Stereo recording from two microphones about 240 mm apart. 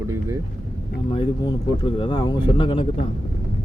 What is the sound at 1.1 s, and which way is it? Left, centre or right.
Speech, left.